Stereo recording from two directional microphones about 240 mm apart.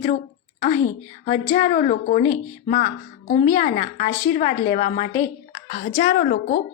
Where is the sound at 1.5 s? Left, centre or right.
Left.